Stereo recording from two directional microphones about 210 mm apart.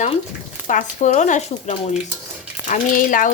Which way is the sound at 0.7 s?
35° left (ahead or behind).